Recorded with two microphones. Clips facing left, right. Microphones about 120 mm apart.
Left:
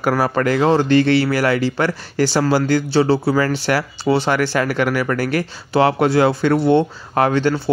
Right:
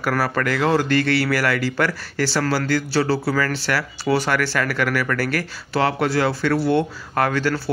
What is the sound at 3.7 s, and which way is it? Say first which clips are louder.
Speech: left 4 dB; 35° left (ahead or behind).